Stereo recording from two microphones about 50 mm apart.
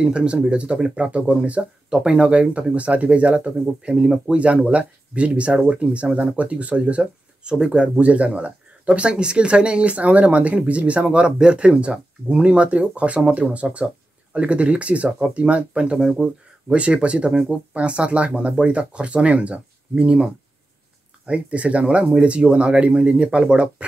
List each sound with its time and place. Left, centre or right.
0.0 s speech: centre
16.7 s speech: right
21.3 s speech: right